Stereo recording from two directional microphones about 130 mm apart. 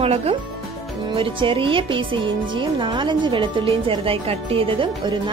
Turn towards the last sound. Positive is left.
turn(degrees=-40)  # may be behind; listen again after turning